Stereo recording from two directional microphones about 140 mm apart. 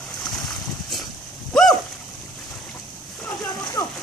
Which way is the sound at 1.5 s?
5° left (ahead or behind).